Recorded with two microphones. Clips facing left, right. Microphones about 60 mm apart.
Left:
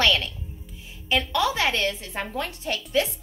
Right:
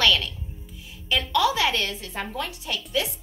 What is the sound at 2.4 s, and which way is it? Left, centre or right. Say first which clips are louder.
Speech: left 1 dB; left.